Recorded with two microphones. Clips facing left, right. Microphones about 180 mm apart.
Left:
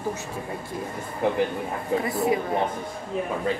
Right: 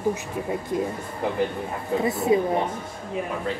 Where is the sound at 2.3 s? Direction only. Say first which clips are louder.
Right 8 dB; 25° right (ahead or behind).